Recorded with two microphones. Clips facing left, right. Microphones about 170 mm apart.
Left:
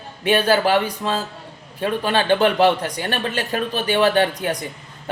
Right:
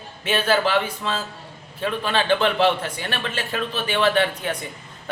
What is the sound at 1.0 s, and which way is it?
A man's voice, 35° left (ahead or behind).